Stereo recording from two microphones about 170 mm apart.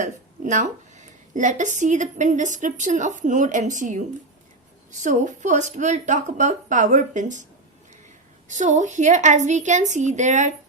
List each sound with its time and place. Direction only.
0.0 s speech: 45° right (ahead or behind)
8.4 s speech: 45° right (ahead or behind)